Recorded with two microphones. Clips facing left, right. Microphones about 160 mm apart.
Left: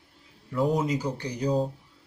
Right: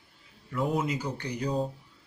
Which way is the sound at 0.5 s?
35° left (ahead or behind).